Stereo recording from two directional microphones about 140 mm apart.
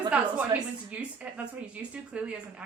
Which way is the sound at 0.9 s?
10° right (ahead or behind).